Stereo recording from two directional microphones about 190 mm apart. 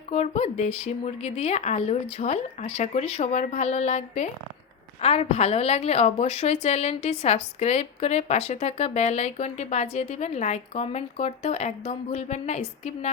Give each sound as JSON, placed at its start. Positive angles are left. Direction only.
{"t": 0.1, "sound": "a woman's voice", "side_deg": 35}